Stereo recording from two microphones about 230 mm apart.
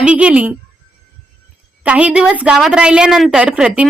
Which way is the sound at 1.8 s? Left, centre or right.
Centre.